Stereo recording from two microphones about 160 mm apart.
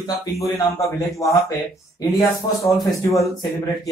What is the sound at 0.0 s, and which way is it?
A man's voice, 20° left (ahead or behind).